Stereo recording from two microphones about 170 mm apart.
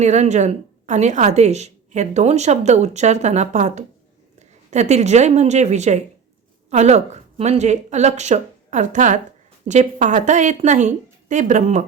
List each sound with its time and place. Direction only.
0.0 s a woman's voice: 40° right (ahead or behind)